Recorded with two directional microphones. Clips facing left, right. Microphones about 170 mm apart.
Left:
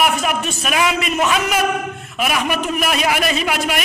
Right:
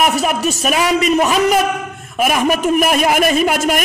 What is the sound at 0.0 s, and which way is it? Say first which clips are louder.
A man's voice: right 3 dB; 40° right (ahead or behind).